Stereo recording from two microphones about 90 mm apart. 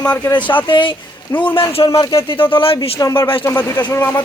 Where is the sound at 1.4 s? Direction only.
80° left.